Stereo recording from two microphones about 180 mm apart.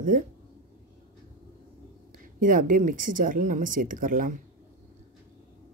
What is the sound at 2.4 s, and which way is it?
Speech, 50° right (ahead or behind).